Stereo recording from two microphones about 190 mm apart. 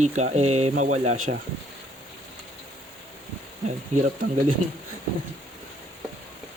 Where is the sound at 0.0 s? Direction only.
35° right (ahead or behind).